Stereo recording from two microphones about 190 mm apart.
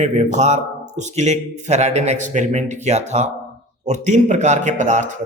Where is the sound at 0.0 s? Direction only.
40° right (ahead or behind).